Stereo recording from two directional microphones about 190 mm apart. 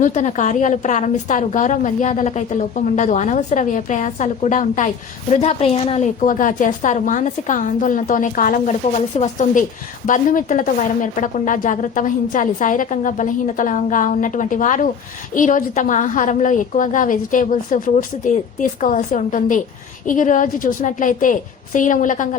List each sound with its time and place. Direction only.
0.0 s a woman's voice: 40° left (ahead or behind)